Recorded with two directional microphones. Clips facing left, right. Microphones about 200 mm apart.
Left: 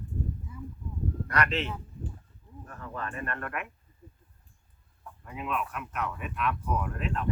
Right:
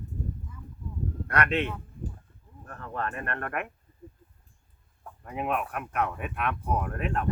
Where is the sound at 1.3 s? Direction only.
55° right (ahead or behind).